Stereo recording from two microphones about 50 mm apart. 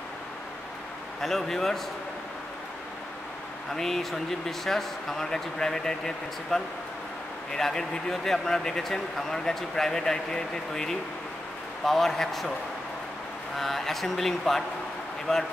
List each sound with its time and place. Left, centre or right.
1.2 s speech: centre
3.7 s a man's voice: centre
13.6 s a man's voice: centre